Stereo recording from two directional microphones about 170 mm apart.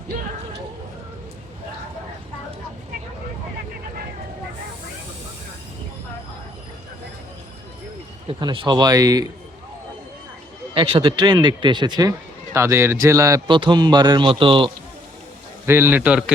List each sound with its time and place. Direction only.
8.3 s a man's voice: 30° right (ahead or behind)
10.8 s a man's voice: 30° right (ahead or behind)
15.6 s a man's voice: 15° right (ahead or behind)